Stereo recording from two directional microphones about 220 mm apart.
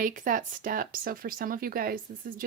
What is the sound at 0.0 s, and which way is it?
Speech, 35° right (ahead or behind).